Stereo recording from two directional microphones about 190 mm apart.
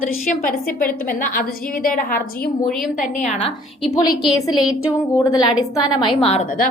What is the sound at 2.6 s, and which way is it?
Speech, centre (ahead or behind).